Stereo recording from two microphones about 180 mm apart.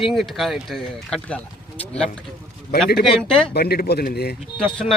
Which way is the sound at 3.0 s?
5° left (ahead or behind).